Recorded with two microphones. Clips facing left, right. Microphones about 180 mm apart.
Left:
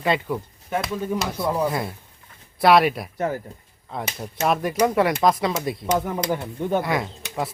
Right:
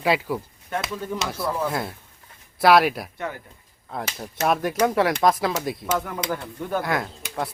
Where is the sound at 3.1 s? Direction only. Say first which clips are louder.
Left 7 dB; 40° left (ahead or behind).